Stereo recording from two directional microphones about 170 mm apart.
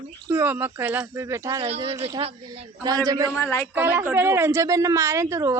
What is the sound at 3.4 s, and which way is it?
Speech, 15° left (ahead or behind).